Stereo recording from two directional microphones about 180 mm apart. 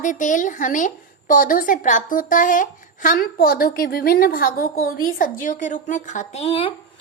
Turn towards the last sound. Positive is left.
turn(degrees=30)  # may be behind; listen again after turning